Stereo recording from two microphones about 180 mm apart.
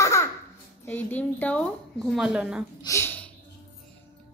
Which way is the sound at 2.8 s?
15° left (ahead or behind).